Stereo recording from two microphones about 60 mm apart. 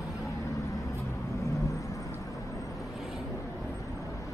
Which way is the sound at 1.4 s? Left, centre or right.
Left.